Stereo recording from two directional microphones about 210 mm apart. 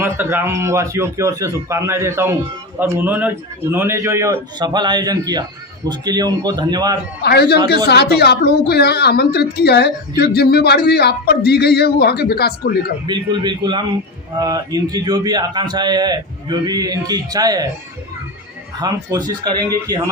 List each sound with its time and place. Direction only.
0.0 s a man's voice: 10° right (ahead or behind)
7.2 s a woman's voice: 50° left (ahead or behind)
13.1 s a man's voice: 20° right (ahead or behind)
18.8 s a man's voice: 20° right (ahead or behind)